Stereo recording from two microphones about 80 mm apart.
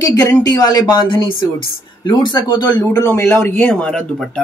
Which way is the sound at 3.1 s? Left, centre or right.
Left.